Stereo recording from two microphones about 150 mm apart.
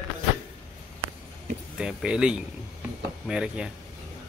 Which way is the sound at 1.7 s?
5° right (ahead or behind).